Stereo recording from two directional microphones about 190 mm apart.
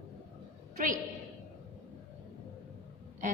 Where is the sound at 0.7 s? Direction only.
45° right (ahead or behind).